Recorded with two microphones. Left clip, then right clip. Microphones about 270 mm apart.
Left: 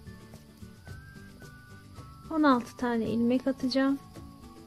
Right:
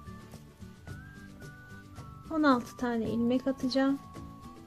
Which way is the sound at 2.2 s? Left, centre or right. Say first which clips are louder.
Left 2 dB; centre.